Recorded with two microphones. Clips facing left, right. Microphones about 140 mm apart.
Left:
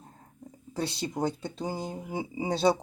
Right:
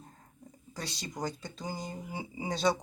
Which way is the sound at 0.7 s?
30° left (ahead or behind).